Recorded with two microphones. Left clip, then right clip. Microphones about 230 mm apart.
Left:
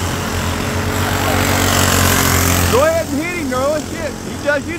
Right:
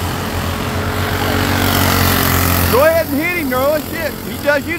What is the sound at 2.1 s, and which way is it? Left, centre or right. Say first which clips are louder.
Vehicle: left 1 dB; centre.